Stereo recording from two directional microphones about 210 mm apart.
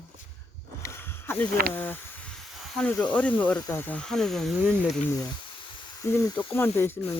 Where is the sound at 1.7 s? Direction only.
10° left (ahead or behind).